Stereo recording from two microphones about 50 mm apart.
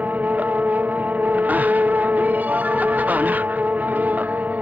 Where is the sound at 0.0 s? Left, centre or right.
Right.